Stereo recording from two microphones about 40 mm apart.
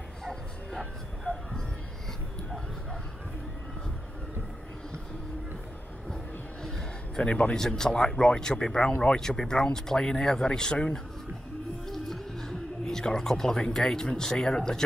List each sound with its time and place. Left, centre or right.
0.2 s bow-wow: centre
0.7 s a sound: centre
7.2 s speech: left
7.5 s speech: centre